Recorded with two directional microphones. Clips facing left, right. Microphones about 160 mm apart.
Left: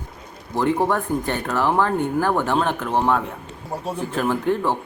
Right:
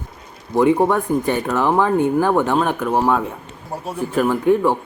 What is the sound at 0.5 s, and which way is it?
Speech, 10° right (ahead or behind).